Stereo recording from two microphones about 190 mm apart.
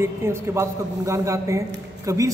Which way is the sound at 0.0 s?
15° right (ahead or behind).